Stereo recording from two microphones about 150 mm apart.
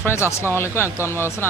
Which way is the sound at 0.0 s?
15° left (ahead or behind).